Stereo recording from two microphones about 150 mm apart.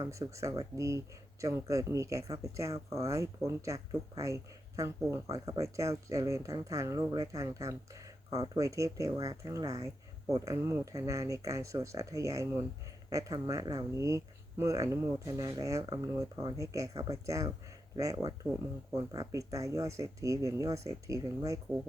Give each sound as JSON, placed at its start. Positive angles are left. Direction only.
{"t": 0.0, "sound": "speech", "side_deg": -20}